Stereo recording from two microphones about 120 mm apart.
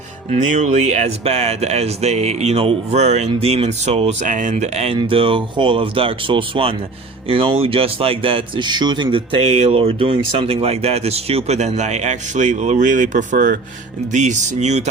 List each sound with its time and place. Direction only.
0.3 s a man's voice: 75° right (ahead or behind); by 4.9 s 60° right (ahead or behind)
4.9 s a man's voice: 50° right (ahead or behind); by 14.8 s 70° right (ahead or behind)